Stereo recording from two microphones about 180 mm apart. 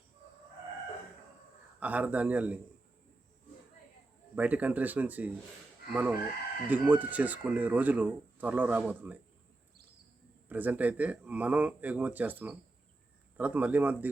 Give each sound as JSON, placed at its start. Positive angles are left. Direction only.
{"t": 1.8, "sound": "speech", "side_deg": -10}
{"t": 4.4, "sound": "speech", "side_deg": -10}
{"t": 10.5, "sound": "speech", "side_deg": -10}